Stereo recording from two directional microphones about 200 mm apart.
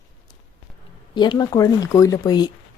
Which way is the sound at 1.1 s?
20° left (ahead or behind).